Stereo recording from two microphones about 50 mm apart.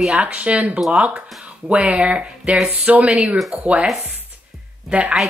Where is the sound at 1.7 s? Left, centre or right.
Right.